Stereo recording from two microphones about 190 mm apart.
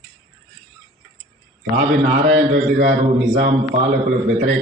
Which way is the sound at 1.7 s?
45° right (ahead or behind).